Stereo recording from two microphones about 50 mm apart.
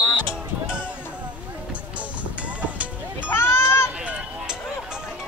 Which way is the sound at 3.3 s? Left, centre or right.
Left.